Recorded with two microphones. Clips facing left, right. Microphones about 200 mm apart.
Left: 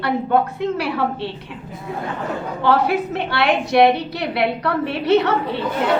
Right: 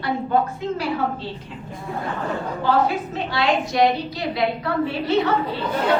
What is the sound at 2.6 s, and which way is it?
A woman's voice, 70° left (ahead or behind).